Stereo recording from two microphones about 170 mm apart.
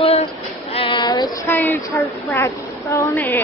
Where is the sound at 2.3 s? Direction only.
15° left (ahead or behind).